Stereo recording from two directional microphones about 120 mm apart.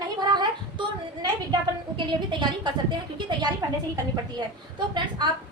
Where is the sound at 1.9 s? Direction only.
40° right (ahead or behind).